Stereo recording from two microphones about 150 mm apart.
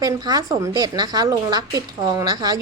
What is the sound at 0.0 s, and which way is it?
Speech, 25° right (ahead or behind).